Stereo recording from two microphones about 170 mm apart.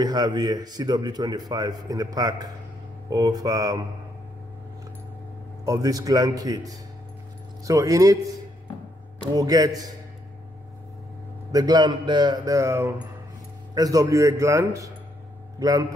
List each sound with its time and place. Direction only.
0.0 s a man's voice: 25° right (ahead or behind)
5.7 s a man's voice: 20° right (ahead or behind)
9.3 s a man's voice: 20° right (ahead or behind)
11.5 s a man's voice: 25° right (ahead or behind)